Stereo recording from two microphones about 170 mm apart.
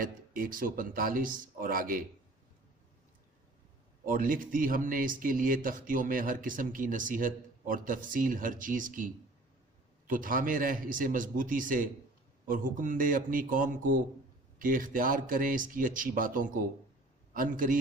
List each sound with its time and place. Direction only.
0.0 s speech: 55° right (ahead or behind)
4.0 s speech: 55° right (ahead or behind)